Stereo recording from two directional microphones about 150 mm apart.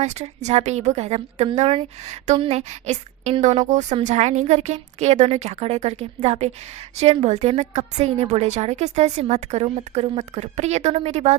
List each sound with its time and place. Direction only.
0.0 s a woman's voice: 50° right (ahead or behind)